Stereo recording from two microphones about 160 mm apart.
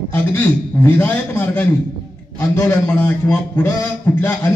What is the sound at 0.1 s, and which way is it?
A man's voice, 15° left (ahead or behind).